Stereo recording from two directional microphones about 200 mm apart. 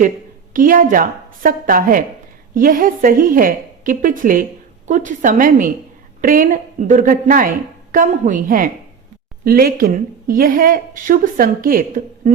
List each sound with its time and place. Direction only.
0.5 s a woman's voice: 40° right (ahead or behind)